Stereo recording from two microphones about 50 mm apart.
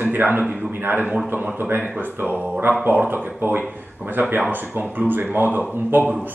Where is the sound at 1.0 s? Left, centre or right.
Centre.